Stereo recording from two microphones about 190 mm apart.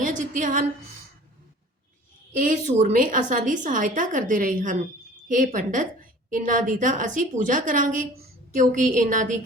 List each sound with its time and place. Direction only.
0.0 s a woman's voice: 40° right (ahead or behind)
2.3 s a woman's voice: 45° right (ahead or behind)